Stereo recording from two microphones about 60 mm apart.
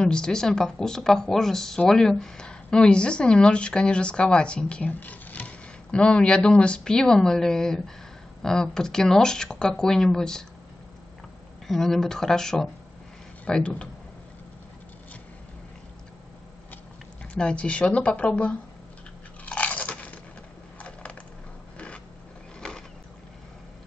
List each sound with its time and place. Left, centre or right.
0.0 s a woman's voice: centre
11.6 s a woman's voice: centre
17.2 s speech: centre
19.4 s crunch: left
20.8 s crushing: centre
21.7 s a sound: centre
22.6 s vehicle: centre